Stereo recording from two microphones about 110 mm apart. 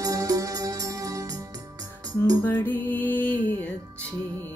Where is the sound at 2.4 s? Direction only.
20° left (ahead or behind).